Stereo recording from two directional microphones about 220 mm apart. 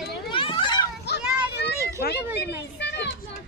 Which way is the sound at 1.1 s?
50° left (ahead or behind).